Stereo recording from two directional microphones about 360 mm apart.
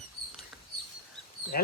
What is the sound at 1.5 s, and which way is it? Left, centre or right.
Speech, left.